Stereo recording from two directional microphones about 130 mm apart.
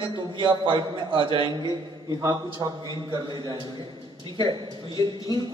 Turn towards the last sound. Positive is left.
turn(degrees=-35)  # may be behind; listen again after turning